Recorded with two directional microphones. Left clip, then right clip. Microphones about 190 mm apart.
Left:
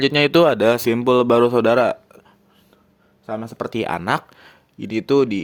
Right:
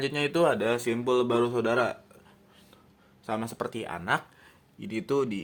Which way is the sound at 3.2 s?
25° left (ahead or behind).